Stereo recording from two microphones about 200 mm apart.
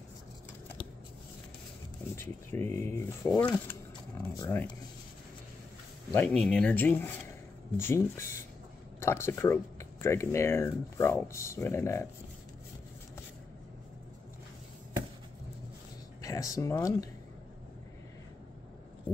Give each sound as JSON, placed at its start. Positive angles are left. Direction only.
{"t": 2.1, "sound": "speech", "side_deg": 10}
{"t": 6.1, "sound": "speech", "side_deg": 5}
{"t": 16.2, "sound": "speech", "side_deg": 15}